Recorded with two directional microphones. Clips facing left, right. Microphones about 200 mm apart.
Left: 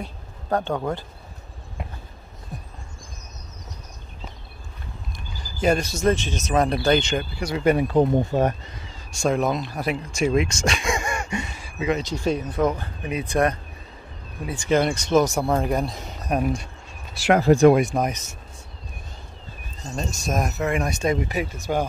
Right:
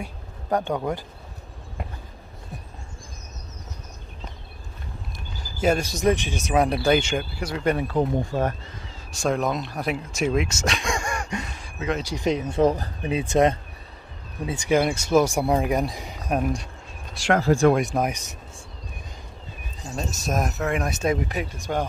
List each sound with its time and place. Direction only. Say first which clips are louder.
0.0 s speech: even; 15° right (ahead or behind)
2.5 s a sound: left 2 dB; 5° right (ahead or behind)
5.6 s speech: left 1 dB; 5° right (ahead or behind)
7.8 s speech: left 4 dB; 20° left (ahead or behind)
8.8 s speech: left 2 dB; centre (ahead or behind)
12.0 s speech: even; 15° right (ahead or behind)
14.7 s speech: left 1 dB; 10° right (ahead or behind)
16.3 s speech: left 1 dB; centre (ahead or behind)
17.4 s speech: left 4 dB; 20° left (ahead or behind)
17.7 s speech: left 2 dB; centre (ahead or behind)
20.0 s speech: left 1 dB; 5° right (ahead or behind)